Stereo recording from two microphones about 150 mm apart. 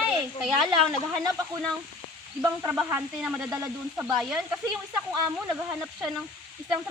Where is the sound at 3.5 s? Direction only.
15° right (ahead or behind).